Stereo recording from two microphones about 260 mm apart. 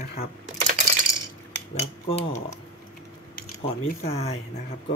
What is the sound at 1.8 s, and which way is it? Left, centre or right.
Speech, left.